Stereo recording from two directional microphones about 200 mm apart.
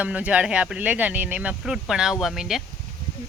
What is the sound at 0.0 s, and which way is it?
Speech, 5° right (ahead or behind).